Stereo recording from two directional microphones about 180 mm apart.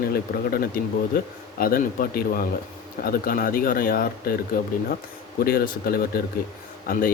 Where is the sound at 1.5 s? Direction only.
55° left (ahead or behind).